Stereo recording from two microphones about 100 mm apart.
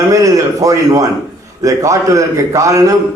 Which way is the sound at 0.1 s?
35° right (ahead or behind).